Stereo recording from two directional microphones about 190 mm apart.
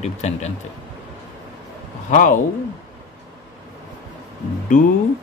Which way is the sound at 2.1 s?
45° left (ahead or behind).